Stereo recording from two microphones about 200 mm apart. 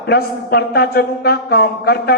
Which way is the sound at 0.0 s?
55° left (ahead or behind).